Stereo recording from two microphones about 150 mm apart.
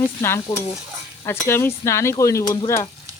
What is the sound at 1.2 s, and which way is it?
Speech, 15° left (ahead or behind).